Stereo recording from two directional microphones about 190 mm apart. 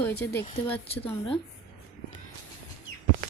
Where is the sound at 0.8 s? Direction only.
30° left (ahead or behind).